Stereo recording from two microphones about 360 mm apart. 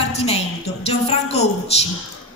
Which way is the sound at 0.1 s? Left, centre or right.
Centre.